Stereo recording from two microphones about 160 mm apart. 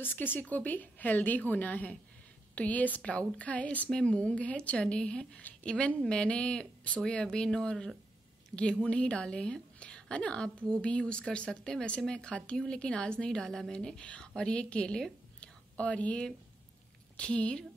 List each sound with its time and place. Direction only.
0.0 s a woman's voice: 10° left (ahead or behind)